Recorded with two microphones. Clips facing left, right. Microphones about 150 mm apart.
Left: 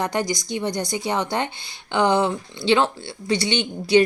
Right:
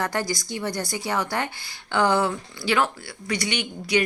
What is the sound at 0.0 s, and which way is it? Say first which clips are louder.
A woman's voice: left 3 dB; 20° left (ahead or behind).